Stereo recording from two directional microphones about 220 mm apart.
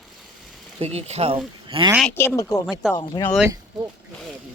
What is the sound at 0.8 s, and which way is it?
Speech, 30° right (ahead or behind).